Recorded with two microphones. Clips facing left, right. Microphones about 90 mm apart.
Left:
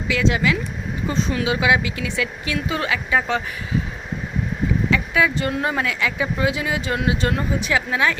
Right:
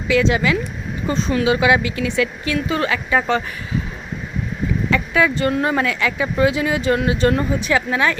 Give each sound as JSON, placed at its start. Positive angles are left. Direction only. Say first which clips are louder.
{"t": 0.1, "sound": "speech", "louder": "right 4 dB", "side_deg": 0}
{"t": 4.9, "sound": "speech", "louder": "right 3 dB", "side_deg": 5}